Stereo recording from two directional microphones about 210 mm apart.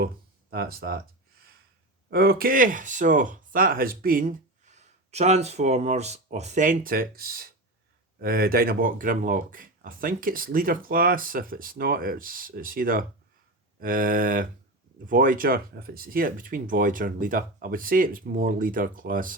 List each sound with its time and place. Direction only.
0.5 s speech: 45° right (ahead or behind)
2.0 s speech: 45° right (ahead or behind)